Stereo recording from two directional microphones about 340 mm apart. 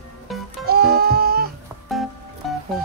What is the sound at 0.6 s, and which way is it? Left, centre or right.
Goat, right.